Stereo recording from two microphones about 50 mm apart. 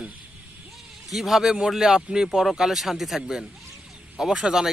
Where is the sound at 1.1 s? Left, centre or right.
Centre.